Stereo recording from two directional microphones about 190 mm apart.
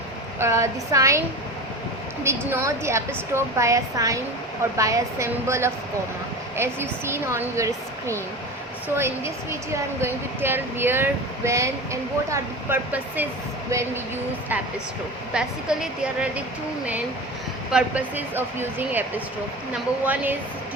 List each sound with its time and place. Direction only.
0.3 s speech: 15° right (ahead or behind)
2.2 s speech: 15° right (ahead or behind)
15.3 s a woman's voice: 5° right (ahead or behind)
17.7 s speech: 5° right (ahead or behind)